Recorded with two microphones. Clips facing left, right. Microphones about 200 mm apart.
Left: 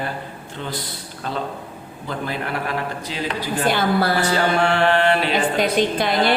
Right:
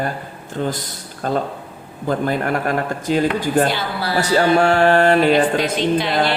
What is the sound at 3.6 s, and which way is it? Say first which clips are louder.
Speech: left 3 dB; 50° left (ahead or behind).